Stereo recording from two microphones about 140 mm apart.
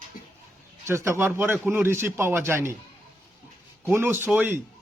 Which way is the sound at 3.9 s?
15° right (ahead or behind).